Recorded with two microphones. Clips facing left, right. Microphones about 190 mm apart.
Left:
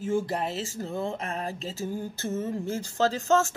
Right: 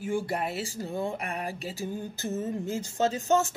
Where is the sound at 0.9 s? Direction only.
15° right (ahead or behind).